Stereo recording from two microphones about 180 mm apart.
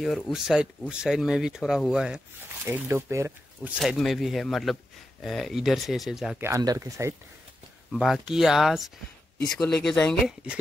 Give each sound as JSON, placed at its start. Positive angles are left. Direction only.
{"t": 0.0, "sound": "speech", "side_deg": 0}
{"t": 6.4, "sound": "speech", "side_deg": -20}
{"t": 7.9, "sound": "speech", "side_deg": 0}